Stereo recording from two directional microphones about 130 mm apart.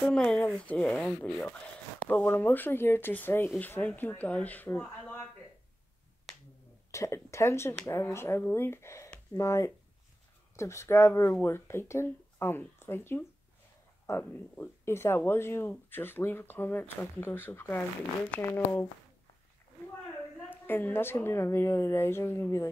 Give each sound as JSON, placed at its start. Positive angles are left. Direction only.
{"t": 0.0, "sound": "speech", "side_deg": 5}
{"t": 6.9, "sound": "speech", "side_deg": 20}
{"t": 20.4, "sound": "speech", "side_deg": 15}